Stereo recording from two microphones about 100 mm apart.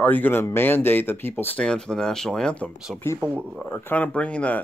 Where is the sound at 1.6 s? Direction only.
5° left (ahead or behind).